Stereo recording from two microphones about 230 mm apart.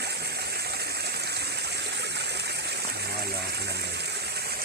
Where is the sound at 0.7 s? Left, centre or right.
Right.